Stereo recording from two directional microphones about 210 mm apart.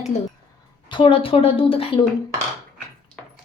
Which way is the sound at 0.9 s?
25° left (ahead or behind).